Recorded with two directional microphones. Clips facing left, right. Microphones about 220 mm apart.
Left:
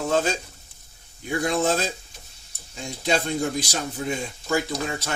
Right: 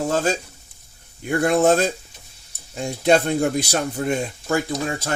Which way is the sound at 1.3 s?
60° right (ahead or behind).